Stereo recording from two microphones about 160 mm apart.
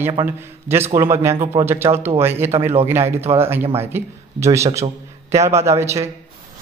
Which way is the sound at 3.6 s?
40° right (ahead or behind).